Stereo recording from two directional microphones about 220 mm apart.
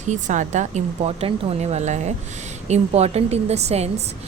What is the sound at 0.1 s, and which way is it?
A woman's voice, 35° right (ahead or behind).